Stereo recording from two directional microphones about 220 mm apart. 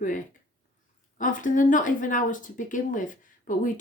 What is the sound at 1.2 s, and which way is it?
Speech, 35° left (ahead or behind).